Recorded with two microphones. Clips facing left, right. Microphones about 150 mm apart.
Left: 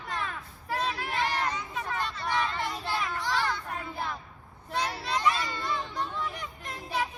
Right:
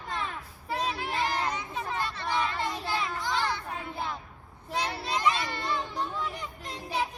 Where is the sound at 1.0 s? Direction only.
20° right (ahead or behind).